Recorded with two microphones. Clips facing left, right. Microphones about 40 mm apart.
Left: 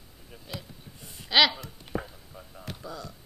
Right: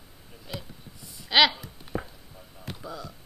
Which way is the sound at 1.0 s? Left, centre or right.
Left.